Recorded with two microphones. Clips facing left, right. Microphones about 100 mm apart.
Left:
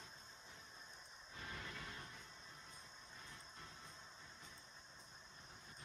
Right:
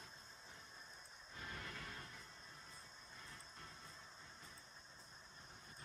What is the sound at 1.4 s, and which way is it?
Music, 5° left (ahead or behind).